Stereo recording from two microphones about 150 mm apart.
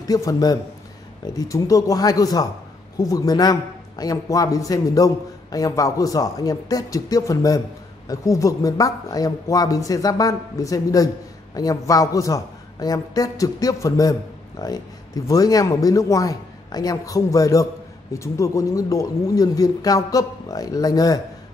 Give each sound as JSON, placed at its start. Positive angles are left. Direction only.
{"t": 0.0, "sound": "a man's voice", "side_deg": 25}